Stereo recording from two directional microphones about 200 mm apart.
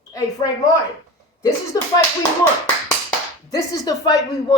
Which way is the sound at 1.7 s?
20° left (ahead or behind).